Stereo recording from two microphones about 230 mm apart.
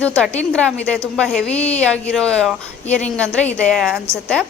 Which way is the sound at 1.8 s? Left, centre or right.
Centre.